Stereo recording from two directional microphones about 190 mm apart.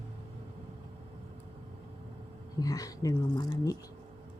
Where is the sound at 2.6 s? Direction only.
20° left (ahead or behind).